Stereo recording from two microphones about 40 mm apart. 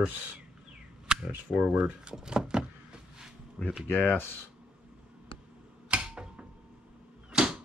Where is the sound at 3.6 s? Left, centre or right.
Left.